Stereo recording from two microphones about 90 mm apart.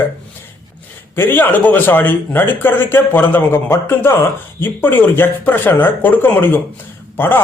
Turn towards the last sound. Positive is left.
turn(degrees=25)  # may be behind; listen again after turning